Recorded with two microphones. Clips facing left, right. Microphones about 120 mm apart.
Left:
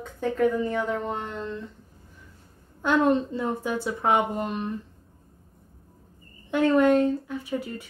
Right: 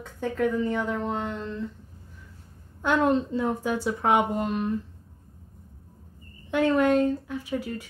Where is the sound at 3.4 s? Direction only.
15° right (ahead or behind).